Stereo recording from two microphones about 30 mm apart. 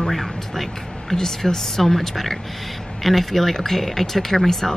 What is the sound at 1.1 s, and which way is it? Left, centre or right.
Speech, centre.